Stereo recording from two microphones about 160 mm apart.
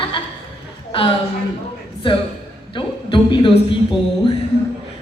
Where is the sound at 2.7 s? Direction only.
30° left (ahead or behind).